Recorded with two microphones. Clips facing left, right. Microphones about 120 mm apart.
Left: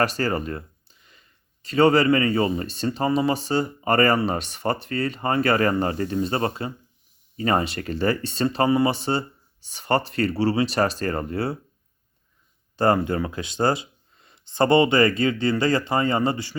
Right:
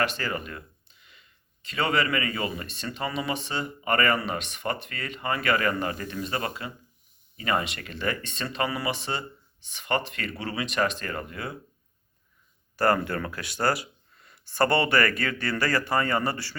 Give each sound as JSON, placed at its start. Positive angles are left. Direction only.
{"t": 0.0, "sound": "speech", "side_deg": 40}
{"t": 12.7, "sound": "speech", "side_deg": 20}